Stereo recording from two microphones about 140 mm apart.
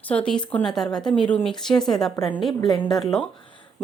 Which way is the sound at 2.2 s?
25° left (ahead or behind).